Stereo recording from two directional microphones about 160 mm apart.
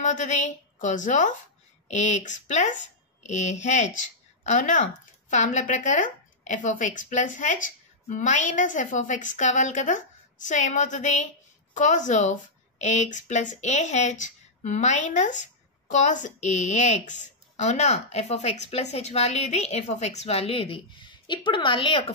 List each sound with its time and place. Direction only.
0.0 s a woman's voice: 50° left (ahead or behind); by 22.1 s 35° left (ahead or behind)